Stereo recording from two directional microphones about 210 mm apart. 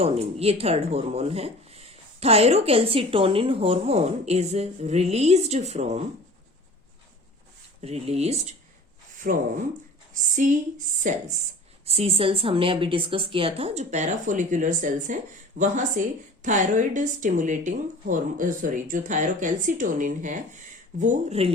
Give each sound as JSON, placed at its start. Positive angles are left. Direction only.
{"t": 0.0, "sound": "speech", "side_deg": -30}
{"t": 7.8, "sound": "speech", "side_deg": -30}
{"t": 9.2, "sound": "speech", "side_deg": -45}